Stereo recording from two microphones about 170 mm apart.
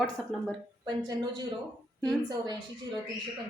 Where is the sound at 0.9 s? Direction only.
25° right (ahead or behind).